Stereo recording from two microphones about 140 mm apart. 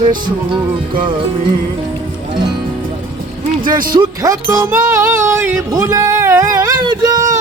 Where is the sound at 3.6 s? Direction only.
80° right.